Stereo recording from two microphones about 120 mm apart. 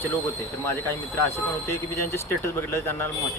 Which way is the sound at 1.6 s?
20° left (ahead or behind).